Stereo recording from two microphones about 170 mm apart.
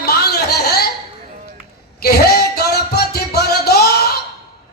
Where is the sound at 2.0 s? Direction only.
70° left (ahead or behind).